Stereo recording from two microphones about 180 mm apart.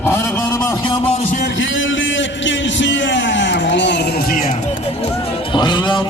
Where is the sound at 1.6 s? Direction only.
90° left; by 4.4 s 55° left (ahead or behind).